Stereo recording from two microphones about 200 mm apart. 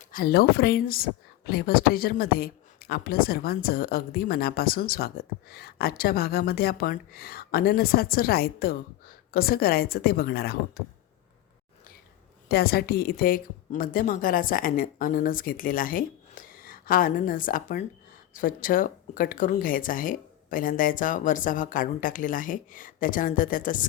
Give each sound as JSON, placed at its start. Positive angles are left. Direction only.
{"t": 0.1, "sound": "speech", "side_deg": 50}
{"t": 12.5, "sound": "speech", "side_deg": 50}